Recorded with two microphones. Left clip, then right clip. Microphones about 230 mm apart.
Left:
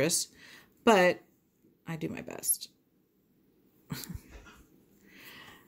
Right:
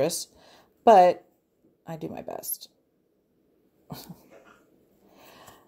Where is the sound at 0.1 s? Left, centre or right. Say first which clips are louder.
Left 2 dB; left.